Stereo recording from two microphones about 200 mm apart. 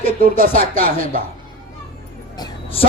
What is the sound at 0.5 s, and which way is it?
Music, 30° left (ahead or behind).